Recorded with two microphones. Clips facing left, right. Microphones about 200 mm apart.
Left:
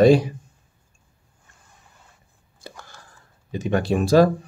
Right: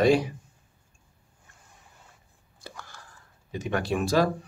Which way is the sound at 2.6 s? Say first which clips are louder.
Left 3 dB; 25° left (ahead or behind).